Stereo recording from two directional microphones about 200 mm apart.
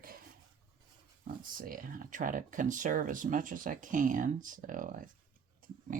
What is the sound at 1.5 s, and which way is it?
Speech, 45° right (ahead or behind).